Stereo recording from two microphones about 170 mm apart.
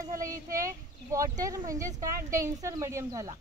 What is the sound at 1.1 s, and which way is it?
Speech, 20° right (ahead or behind).